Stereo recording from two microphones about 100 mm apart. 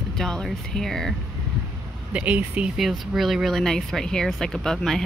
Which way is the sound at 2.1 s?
10° right (ahead or behind).